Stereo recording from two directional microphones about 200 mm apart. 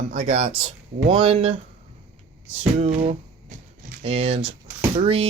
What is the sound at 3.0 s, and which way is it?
Speech, 40° right (ahead or behind).